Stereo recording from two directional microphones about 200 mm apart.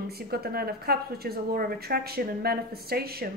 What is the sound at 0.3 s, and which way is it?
A woman's voice, 50° right (ahead or behind).